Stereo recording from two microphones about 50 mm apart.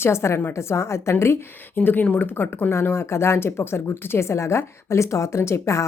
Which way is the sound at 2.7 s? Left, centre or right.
Left.